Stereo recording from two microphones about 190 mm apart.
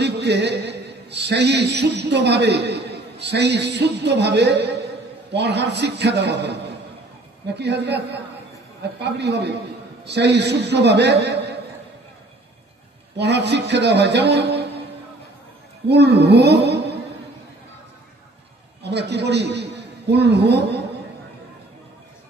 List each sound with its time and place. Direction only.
0.0 s a man's voice: 65° right (ahead or behind)
13.2 s speech: 65° right (ahead or behind)
15.9 s speech: 60° right (ahead or behind)
18.8 s a man's voice: 65° right (ahead or behind)